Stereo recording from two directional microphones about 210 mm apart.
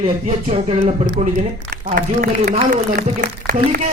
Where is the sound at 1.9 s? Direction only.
45° right (ahead or behind).